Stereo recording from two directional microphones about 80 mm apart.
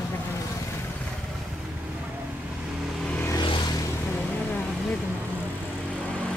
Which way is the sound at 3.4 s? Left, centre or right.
Left.